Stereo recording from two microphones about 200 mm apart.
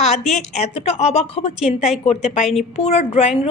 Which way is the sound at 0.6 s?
30° left (ahead or behind).